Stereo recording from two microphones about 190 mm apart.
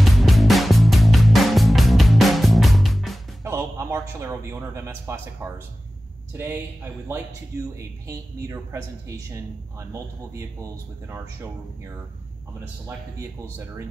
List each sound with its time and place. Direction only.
0.0 s music: centre (ahead or behind)
3.4 s a man's voice: 15° right (ahead or behind)